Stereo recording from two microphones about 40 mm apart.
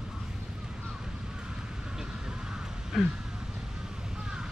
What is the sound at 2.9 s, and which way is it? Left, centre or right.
Speech, centre.